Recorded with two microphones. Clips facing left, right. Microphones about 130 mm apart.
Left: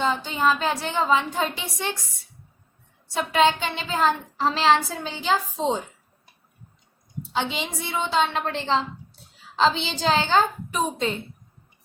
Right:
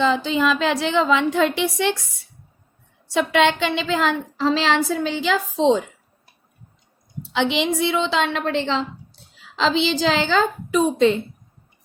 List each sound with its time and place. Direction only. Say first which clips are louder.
0.0 s a woman's voice: right 4 dB; 90° right
3.2 s a woman's voice: right 3 dB; 85° right
7.3 s a woman's voice: right 8 dB; 80° right